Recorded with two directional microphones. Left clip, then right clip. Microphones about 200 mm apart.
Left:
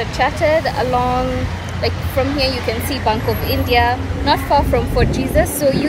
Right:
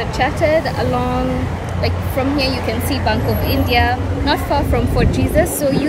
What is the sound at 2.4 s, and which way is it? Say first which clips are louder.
A woman's voice: even; 5° right (ahead or behind).